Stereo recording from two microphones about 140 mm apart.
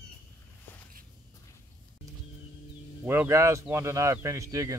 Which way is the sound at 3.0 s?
15° right (ahead or behind).